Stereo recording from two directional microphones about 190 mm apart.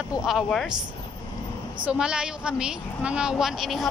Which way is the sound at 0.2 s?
Centre (ahead or behind).